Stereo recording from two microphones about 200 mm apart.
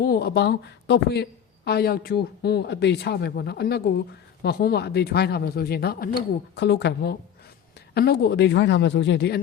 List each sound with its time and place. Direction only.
0.0 s a woman's voice: 50° left (ahead or behind)